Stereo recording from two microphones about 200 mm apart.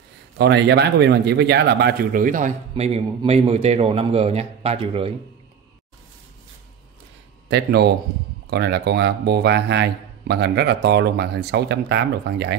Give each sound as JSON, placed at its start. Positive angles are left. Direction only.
{"t": 0.4, "sound": "a man's voice", "side_deg": -55}
{"t": 7.4, "sound": "a man's voice", "side_deg": -55}